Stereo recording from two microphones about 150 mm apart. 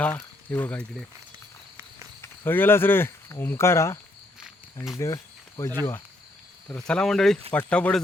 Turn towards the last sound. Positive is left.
turn(degrees=10)  # may be behind; listen again after turning